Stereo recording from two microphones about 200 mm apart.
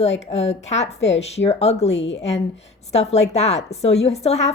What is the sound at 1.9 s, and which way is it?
Speech, 65° left (ahead or behind).